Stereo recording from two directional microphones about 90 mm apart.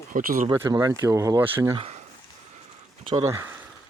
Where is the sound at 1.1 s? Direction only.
35° right (ahead or behind).